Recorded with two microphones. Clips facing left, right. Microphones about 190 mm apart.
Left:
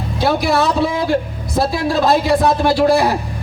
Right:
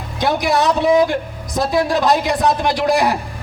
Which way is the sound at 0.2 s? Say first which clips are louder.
Left 1 dB; 15° right (ahead or behind).